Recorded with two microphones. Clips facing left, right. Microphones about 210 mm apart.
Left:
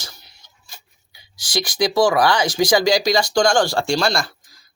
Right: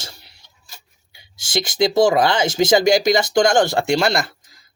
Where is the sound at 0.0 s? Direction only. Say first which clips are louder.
Right 2 dB; 30° right (ahead or behind).